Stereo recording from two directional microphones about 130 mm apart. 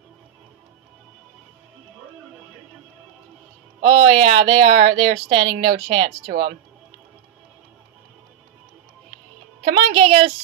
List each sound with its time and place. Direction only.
3.8 s a woman's voice: 50° right (ahead or behind)
9.7 s a woman's voice: 50° right (ahead or behind)